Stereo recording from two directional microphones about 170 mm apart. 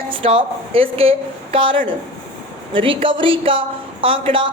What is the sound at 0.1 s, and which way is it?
A woman's voice, 30° right (ahead or behind).